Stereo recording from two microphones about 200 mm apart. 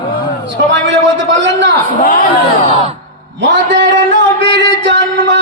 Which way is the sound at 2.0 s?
45° left (ahead or behind).